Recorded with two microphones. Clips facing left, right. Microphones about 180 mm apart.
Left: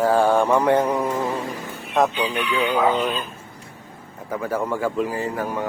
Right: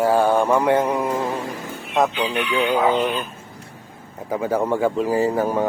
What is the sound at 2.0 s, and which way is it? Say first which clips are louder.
Speech: even; centre (ahead or behind).